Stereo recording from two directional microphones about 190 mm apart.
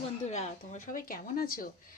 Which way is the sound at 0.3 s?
35° left (ahead or behind).